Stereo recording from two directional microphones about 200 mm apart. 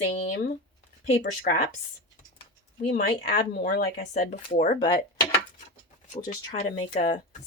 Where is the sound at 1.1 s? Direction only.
40° left (ahead or behind).